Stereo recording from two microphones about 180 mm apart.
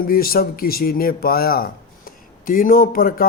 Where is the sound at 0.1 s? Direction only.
55° left (ahead or behind).